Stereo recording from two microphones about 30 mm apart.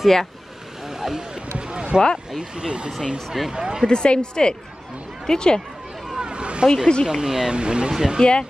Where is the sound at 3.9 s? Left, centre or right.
Left.